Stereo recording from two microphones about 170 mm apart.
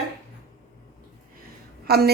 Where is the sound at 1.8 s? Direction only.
65° right (ahead or behind).